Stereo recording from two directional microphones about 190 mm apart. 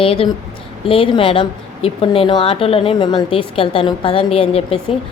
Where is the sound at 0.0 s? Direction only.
30° left (ahead or behind).